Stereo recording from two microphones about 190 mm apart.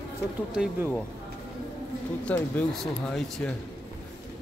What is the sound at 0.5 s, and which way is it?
Speech, 5° right (ahead or behind).